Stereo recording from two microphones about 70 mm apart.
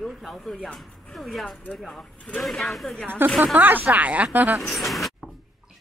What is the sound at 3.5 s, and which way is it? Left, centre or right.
Speech, right.